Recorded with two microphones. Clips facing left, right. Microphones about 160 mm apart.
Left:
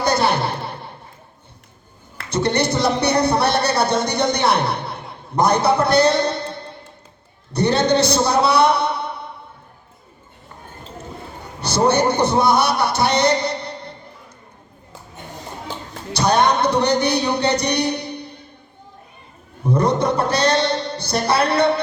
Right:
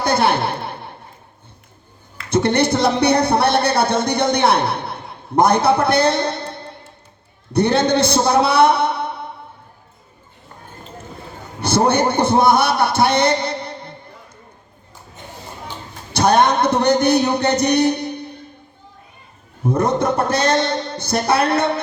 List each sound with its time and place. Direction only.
0.0 s a sound: 55° right (ahead or behind)
2.3 s a man's voice: 55° right (ahead or behind)
11.6 s a man's voice: 55° right (ahead or behind)
16.1 s speech: 55° right (ahead or behind)
19.6 s speech: 50° right (ahead or behind)